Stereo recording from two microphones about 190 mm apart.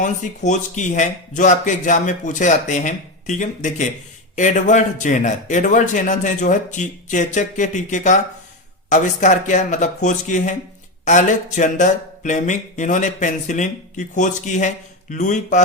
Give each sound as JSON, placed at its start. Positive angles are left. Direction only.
{"t": 0.0, "sound": "a man's voice", "side_deg": 40}